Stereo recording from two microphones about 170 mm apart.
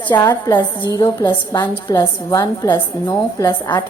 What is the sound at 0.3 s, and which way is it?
A woman's voice, 20° left (ahead or behind).